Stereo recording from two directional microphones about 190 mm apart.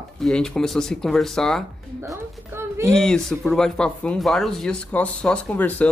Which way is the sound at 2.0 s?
15° right (ahead or behind).